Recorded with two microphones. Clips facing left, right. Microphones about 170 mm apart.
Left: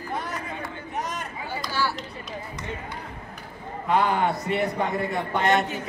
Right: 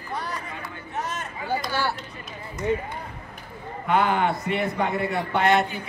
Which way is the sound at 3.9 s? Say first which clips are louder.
Right 1 dB; 35° left (ahead or behind).